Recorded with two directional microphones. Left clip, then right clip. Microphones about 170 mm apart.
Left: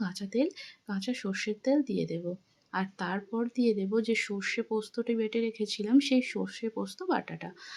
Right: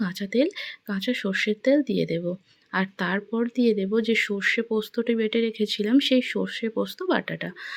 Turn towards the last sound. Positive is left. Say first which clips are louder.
# right 6 dB
turn(degrees=-20)  # may be behind; listen again after turning